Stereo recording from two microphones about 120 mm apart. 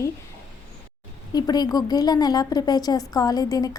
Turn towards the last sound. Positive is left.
turn(degrees=30)  # may be behind; listen again after turning